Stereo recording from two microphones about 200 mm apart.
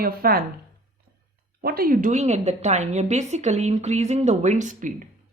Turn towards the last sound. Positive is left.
turn(degrees=-40)  # may be behind; listen again after turning